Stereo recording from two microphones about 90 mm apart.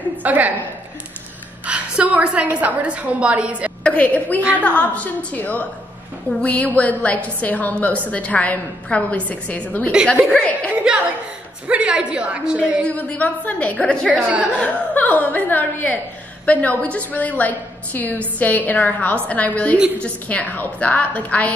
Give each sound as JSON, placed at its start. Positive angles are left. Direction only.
{"t": 0.2, "sound": "a woman's voice", "side_deg": -20}
{"t": 1.7, "sound": "a woman's voice", "side_deg": -15}
{"t": 3.8, "sound": "a woman's voice", "side_deg": 15}
{"t": 10.7, "sound": "a woman's voice", "side_deg": -15}
{"t": 12.8, "sound": "a woman's voice", "side_deg": 15}
{"t": 14.2, "sound": "a woman's voice", "side_deg": -15}
{"t": 14.6, "sound": "a woman's voice", "side_deg": 15}